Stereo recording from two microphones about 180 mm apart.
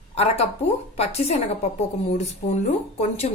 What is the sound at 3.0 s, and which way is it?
Speech, 35° left (ahead or behind).